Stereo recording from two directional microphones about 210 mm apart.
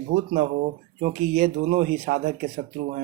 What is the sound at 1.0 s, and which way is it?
Speech, 45° right (ahead or behind).